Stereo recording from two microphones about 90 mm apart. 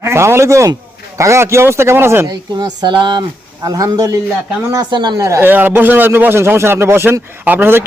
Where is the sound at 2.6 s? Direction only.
50° right (ahead or behind).